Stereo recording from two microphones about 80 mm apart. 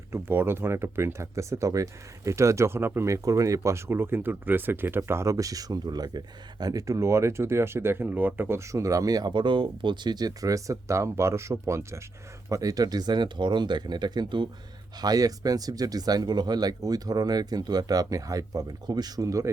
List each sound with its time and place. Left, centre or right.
0.1 s speech: right
3.2 s speech: right
9.3 s speech: right
14.9 s speech: right